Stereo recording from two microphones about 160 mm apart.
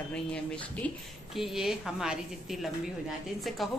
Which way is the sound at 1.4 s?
Centre (ahead or behind).